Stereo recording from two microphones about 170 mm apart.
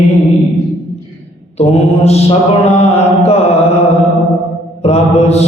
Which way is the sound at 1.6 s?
35° left (ahead or behind).